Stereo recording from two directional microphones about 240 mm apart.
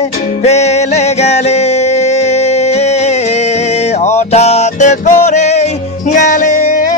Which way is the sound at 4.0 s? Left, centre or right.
Left.